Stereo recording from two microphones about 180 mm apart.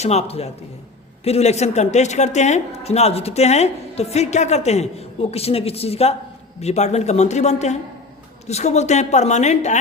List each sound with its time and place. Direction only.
0.0 s speech: 35° left (ahead or behind)